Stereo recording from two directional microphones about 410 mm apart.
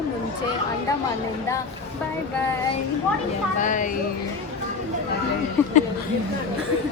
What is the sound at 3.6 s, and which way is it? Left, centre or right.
Speech, centre.